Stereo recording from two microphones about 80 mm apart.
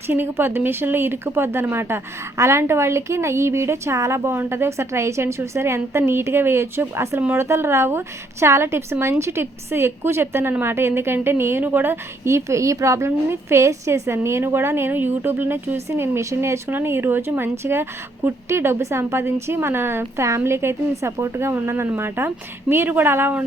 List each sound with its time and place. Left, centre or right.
0.1 s speech: right
7.2 s a woman's voice: right
7.4 s a woman's voice: right